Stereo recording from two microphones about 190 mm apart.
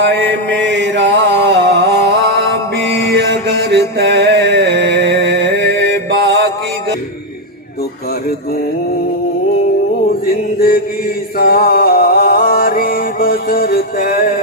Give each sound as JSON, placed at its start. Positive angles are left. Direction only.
{"t": 0.6, "sound": "mantra", "side_deg": -65}
{"t": 11.3, "sound": "mantra", "side_deg": 55}